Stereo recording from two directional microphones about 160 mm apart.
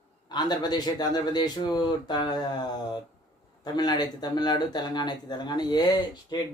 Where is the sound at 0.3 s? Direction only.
25° left (ahead or behind).